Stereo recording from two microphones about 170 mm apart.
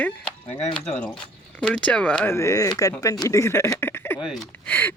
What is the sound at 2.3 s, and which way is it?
Speech, 20° left (ahead or behind).